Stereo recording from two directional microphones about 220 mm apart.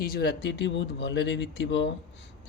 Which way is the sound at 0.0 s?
45° left (ahead or behind).